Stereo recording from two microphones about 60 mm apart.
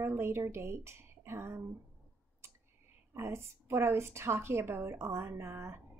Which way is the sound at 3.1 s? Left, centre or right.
Right.